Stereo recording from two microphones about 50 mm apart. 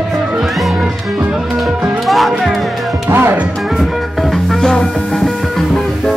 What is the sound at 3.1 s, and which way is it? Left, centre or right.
Speech, right.